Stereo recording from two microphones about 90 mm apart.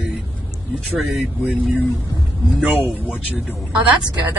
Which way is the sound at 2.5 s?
Centre (ahead or behind).